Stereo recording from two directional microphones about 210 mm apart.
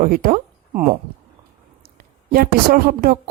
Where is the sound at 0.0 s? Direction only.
45° right (ahead or behind).